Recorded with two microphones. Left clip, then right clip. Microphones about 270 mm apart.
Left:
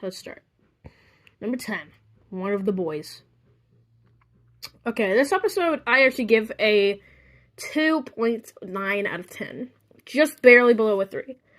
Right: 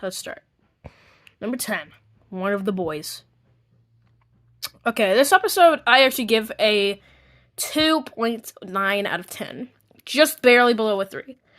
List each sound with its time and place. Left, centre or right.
0.0 s a sound: centre
1.4 s speech: centre
4.6 s speech: centre